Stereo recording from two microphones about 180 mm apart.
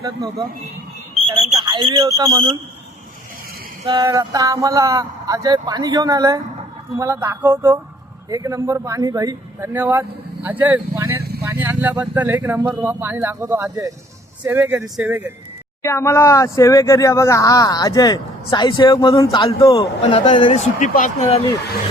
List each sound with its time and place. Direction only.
0.0 s speech: 20° right (ahead or behind)
3.8 s speech: 20° right (ahead or behind)
15.8 s speech: 15° left (ahead or behind)
20.0 s speech: 35° left (ahead or behind)
20.7 s speech: 45° left (ahead or behind)